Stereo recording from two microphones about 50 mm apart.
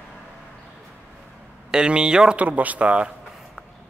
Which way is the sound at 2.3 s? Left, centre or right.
Right.